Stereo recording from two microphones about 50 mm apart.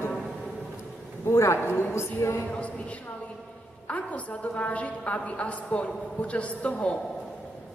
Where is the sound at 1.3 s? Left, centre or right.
Left.